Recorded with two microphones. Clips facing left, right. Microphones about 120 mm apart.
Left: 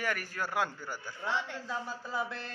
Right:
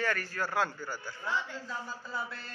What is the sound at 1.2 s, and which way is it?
Speech, 70° left (ahead or behind).